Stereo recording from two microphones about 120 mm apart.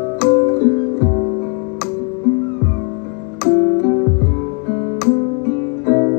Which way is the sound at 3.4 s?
20° left (ahead or behind).